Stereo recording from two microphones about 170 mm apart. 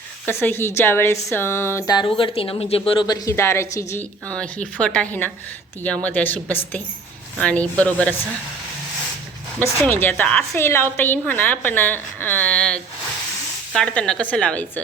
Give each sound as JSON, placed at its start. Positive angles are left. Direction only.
{"t": 0.3, "sound": "a woman's voice", "side_deg": 15}
{"t": 4.3, "sound": "a woman's voice", "side_deg": 5}
{"t": 9.6, "sound": "a woman's voice", "side_deg": 10}